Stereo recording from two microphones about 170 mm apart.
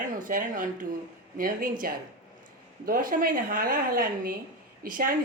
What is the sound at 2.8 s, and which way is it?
A woman's voice, 55° right (ahead or behind).